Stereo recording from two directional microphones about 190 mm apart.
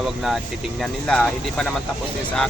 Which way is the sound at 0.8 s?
5° left (ahead or behind).